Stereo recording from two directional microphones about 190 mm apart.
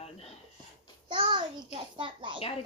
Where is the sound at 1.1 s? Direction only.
25° right (ahead or behind).